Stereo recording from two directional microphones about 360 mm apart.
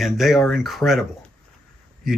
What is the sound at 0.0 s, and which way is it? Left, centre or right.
Speech, centre.